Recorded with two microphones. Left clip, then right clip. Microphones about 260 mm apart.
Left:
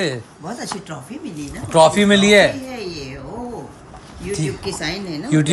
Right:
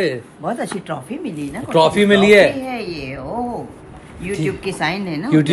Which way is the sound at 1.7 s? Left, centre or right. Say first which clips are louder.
Left 2 dB; centre.